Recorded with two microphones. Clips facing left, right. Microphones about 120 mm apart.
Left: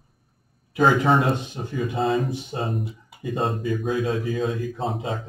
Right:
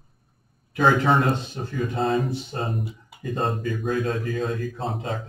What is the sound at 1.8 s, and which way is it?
A man's voice, 5° left (ahead or behind).